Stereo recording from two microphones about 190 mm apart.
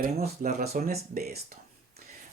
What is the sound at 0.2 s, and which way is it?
Speech, 50° right (ahead or behind).